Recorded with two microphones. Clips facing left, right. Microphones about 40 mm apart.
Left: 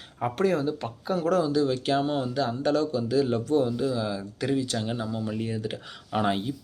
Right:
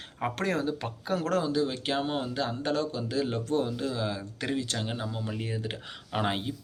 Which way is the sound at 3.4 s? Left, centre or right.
Right.